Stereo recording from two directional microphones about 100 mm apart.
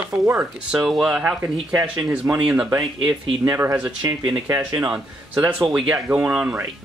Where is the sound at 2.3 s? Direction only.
30° right (ahead or behind).